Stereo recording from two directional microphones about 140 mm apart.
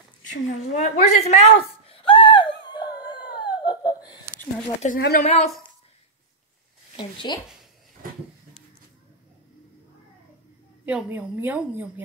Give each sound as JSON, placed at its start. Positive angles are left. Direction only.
{"t": 0.3, "sound": "a woman's voice", "side_deg": 55}
{"t": 1.9, "sound": "a sound", "side_deg": 40}
{"t": 4.8, "sound": "speech", "side_deg": 90}
{"t": 5.2, "sound": "a woman's voice", "side_deg": 50}
{"t": 7.2, "sound": "speech", "side_deg": 35}
{"t": 10.9, "sound": "a woman's voice", "side_deg": -10}